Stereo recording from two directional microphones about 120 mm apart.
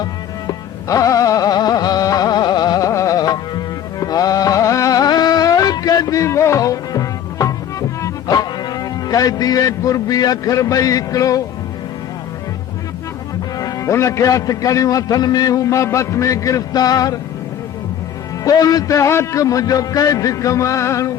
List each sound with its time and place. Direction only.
0.0 s music: 30° left (ahead or behind)
13.6 s a man's voice: 30° left (ahead or behind)
18.4 s a man's voice: 30° left (ahead or behind)